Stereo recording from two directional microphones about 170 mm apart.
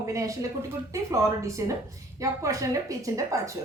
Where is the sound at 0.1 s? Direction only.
20° right (ahead or behind).